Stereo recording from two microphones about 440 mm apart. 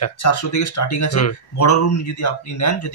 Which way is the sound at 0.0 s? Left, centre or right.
Left.